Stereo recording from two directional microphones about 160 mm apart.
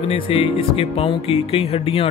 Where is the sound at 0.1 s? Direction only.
35° left (ahead or behind).